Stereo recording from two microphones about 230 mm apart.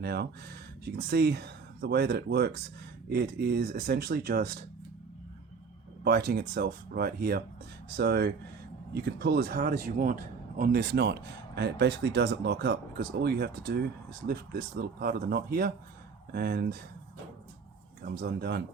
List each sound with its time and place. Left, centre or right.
0.0 s a man's voice: right
6.1 s a man's voice: right
18.0 s a man's voice: right